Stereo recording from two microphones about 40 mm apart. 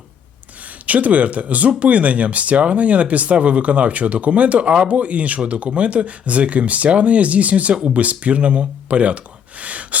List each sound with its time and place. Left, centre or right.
0.9 s speech: right